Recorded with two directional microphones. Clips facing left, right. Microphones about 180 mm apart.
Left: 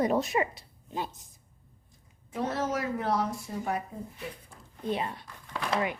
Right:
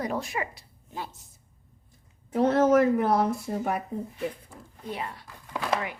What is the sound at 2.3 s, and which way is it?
A woman's voice, 60° right (ahead or behind).